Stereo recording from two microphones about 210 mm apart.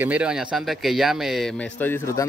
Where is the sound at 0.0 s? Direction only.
5° right (ahead or behind).